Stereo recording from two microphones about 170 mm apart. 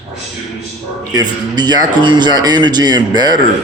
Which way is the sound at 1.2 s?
25° right (ahead or behind).